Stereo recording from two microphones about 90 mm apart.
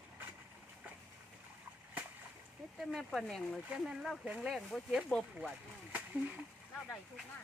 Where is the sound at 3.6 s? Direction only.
10° right (ahead or behind); by 5.5 s 10° left (ahead or behind).